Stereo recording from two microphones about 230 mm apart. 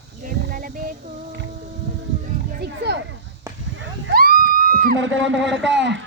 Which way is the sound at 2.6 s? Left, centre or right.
Right.